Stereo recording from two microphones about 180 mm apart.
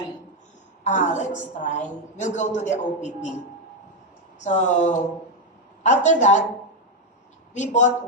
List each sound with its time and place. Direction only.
0.9 s a woman's voice: 40° left (ahead or behind)
4.4 s a woman's voice: 40° left (ahead or behind)
7.5 s a woman's voice: 40° left (ahead or behind)